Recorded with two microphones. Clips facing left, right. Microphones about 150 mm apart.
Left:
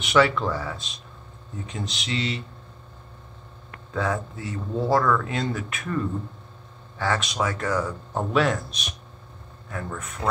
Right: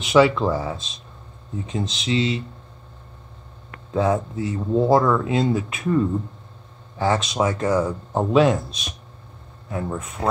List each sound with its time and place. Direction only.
0.1 s speech: 20° right (ahead or behind)
3.9 s speech: 20° right (ahead or behind)
9.7 s speech: 20° right (ahead or behind)